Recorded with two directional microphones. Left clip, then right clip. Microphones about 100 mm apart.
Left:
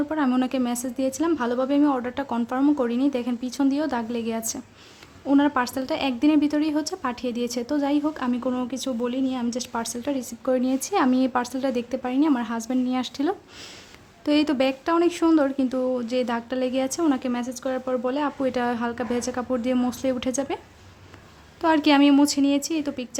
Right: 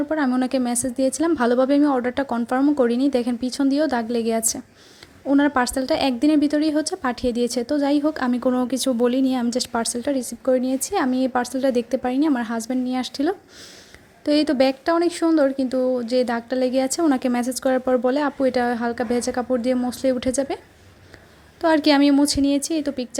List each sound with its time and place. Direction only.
0.3 s a woman's voice: 30° right (ahead or behind)
17.1 s a woman's voice: 50° right (ahead or behind)
18.3 s speech: 25° right (ahead or behind)
21.6 s speech: 20° right (ahead or behind)